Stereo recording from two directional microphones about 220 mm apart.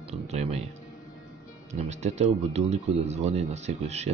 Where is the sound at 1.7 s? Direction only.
30° right (ahead or behind).